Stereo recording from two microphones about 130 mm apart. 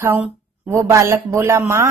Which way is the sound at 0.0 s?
20° right (ahead or behind).